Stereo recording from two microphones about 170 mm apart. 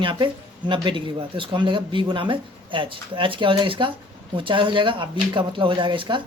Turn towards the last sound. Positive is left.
turn(degrees=-25)  # may be behind; listen again after turning